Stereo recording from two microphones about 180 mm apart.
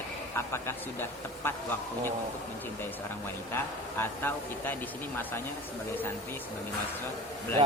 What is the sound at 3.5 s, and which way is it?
Speech, 10° left (ahead or behind).